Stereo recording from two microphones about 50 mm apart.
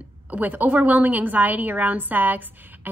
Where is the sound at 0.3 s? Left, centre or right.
Right.